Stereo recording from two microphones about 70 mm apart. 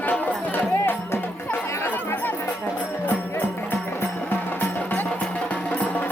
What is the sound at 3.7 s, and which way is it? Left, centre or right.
Music, left.